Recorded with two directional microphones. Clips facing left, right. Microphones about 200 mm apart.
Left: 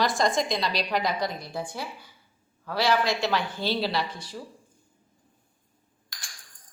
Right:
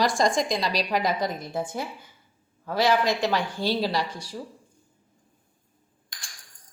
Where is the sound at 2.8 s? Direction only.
15° right (ahead or behind).